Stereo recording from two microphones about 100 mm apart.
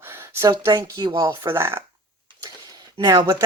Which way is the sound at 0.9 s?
40° right (ahead or behind).